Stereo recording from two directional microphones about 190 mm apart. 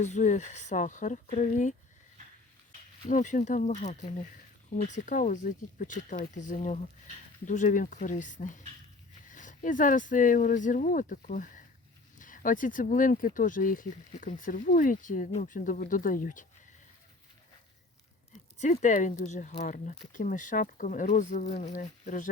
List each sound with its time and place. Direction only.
0.0 s speech: 40° left (ahead or behind)
3.1 s speech: 40° left (ahead or behind)
18.6 s speech: 40° left (ahead or behind)